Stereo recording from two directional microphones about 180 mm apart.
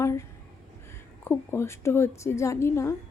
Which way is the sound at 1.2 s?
15° left (ahead or behind).